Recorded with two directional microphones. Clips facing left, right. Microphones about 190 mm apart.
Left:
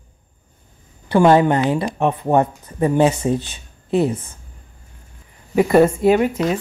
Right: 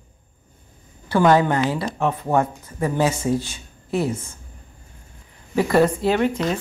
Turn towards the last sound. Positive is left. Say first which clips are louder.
# left 4 dB
turn(degrees=15)  # may be behind; listen again after turning